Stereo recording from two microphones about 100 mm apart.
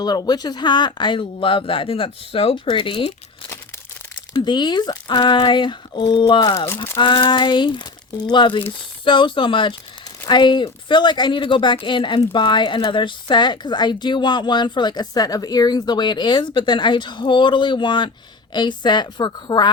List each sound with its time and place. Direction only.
0.0 s speech: 40° left (ahead or behind); by 2.6 s 70° left (ahead or behind)
2.6 s speech: 60° left (ahead or behind)
4.4 s speech: 45° left (ahead or behind)